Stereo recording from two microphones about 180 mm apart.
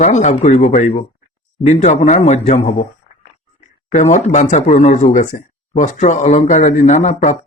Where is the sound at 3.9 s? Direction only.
40° left (ahead or behind).